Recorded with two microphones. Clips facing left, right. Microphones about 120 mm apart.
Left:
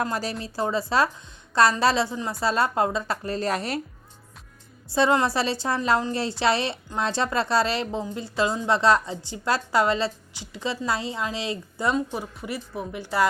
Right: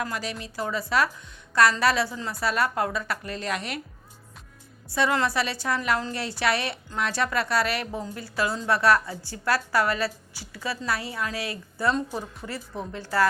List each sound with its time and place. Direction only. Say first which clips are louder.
0.0 s a woman's voice: left 4 dB; 35° left (ahead or behind)
4.9 s a woman's voice: left 3 dB; 25° left (ahead or behind)